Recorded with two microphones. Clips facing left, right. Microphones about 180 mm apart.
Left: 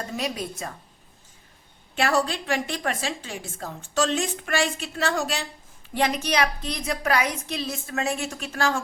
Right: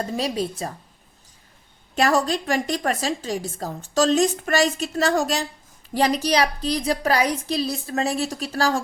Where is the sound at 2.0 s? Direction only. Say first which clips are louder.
Right 3 dB; 40° right (ahead or behind).